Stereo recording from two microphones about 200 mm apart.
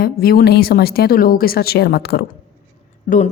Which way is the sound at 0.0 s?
45° left (ahead or behind).